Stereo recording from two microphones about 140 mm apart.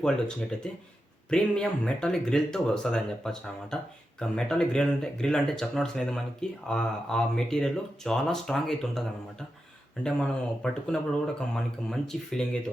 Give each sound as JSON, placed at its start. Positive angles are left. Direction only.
{"t": 0.0, "sound": "speech", "side_deg": 5}